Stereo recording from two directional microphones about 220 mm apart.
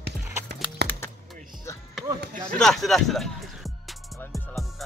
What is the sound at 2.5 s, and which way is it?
Music, centre (ahead or behind).